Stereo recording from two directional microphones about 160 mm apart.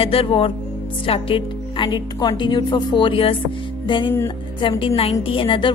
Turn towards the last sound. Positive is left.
turn(degrees=30)  # may be behind; listen again after turning